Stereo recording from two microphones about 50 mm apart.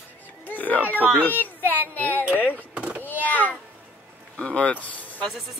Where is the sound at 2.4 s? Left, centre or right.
Right.